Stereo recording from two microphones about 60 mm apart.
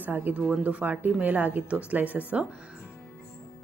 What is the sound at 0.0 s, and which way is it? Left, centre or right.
A woman's voice, right.